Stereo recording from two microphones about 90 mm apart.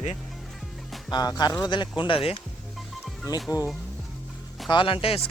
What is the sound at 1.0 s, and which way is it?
Speech, 50° left (ahead or behind).